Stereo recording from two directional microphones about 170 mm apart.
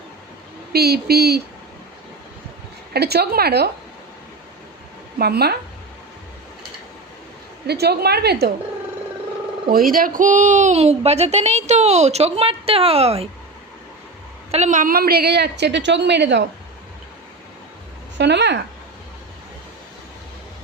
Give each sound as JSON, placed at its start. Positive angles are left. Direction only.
{"t": 0.7, "sound": "a woman's voice", "side_deg": -70}
{"t": 2.9, "sound": "a woman's voice", "side_deg": -70}
{"t": 5.2, "sound": "a woman's voice", "side_deg": -70}
{"t": 7.7, "sound": "a woman's voice", "side_deg": -70}
{"t": 9.6, "sound": "speech", "side_deg": -60}
{"t": 14.5, "sound": "a woman's voice", "side_deg": -45}
{"t": 18.2, "sound": "speech", "side_deg": -90}